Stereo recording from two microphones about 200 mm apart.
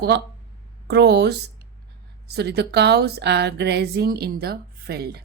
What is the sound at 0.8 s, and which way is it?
A woman's voice, 55° right (ahead or behind).